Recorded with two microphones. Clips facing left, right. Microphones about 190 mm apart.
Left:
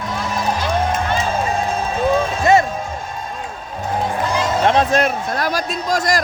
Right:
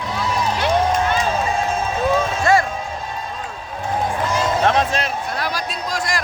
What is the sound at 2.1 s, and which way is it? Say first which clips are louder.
Music: left 3 dB; 20° left (ahead or behind).